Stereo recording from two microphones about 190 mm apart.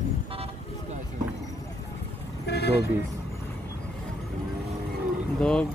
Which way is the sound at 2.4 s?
60° left (ahead or behind).